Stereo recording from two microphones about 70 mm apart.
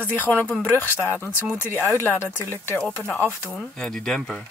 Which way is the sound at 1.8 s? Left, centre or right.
Left.